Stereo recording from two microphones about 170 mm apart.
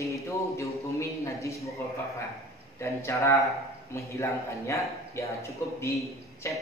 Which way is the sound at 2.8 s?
15° left (ahead or behind).